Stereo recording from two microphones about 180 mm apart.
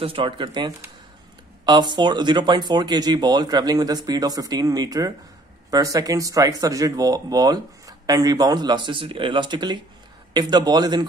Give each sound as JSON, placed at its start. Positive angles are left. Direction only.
{"t": 0.0, "sound": "speech", "side_deg": -30}